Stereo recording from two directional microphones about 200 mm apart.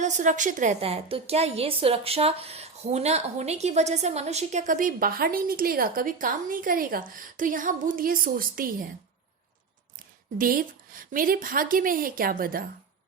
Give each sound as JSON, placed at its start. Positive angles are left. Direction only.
{"t": 0.0, "sound": "a woman's voice", "side_deg": -40}
{"t": 10.3, "sound": "a woman's voice", "side_deg": -45}